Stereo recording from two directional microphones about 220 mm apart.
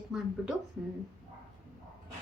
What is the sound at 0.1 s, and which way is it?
Speech, centre (ahead or behind).